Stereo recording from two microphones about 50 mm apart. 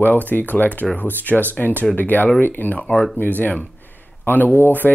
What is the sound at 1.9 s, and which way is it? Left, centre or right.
Speech, left.